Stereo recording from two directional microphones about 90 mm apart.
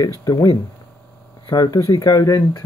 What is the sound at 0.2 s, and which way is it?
Speech, 45° left (ahead or behind).